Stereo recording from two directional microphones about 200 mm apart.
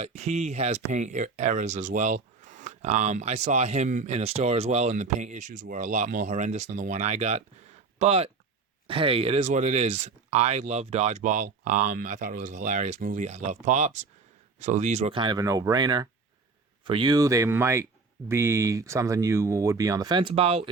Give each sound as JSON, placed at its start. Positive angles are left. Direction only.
{"t": 0.0, "sound": "speech", "side_deg": -35}
{"t": 15.2, "sound": "speech", "side_deg": -20}